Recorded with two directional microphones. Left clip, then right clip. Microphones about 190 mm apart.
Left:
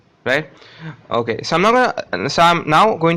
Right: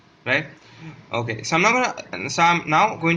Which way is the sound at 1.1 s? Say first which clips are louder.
Left 5 dB; 40° left (ahead or behind).